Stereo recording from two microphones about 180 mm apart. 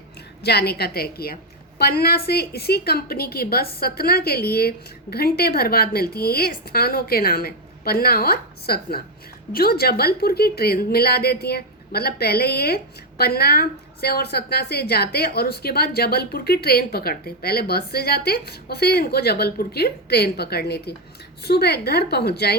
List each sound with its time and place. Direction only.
0.4 s a woman's voice: 65° left (ahead or behind)